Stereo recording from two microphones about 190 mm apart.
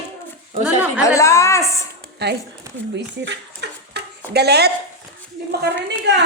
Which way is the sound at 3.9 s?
60° right (ahead or behind).